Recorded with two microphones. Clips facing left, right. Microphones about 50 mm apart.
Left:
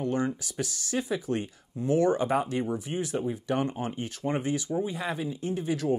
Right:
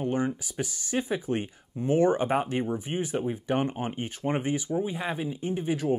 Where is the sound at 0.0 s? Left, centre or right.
Centre.